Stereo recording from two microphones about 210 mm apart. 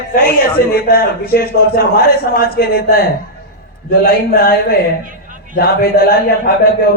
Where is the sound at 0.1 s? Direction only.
45° left (ahead or behind).